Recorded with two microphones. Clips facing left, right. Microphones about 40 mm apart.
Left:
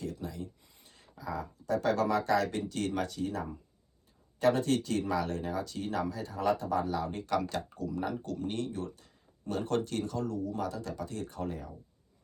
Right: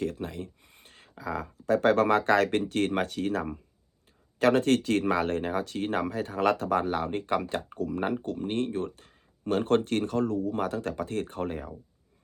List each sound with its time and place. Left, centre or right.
0.0 s speech: right
8.2 s speech: right